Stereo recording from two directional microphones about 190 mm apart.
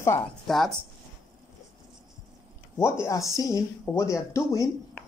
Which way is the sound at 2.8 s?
15° left (ahead or behind).